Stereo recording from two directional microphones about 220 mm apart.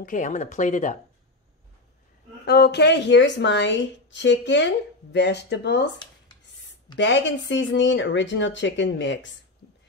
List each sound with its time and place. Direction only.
0.0 s speech: 35° left (ahead or behind)
2.4 s a woman's voice: 50° left (ahead or behind)
7.0 s speech: 55° left (ahead or behind)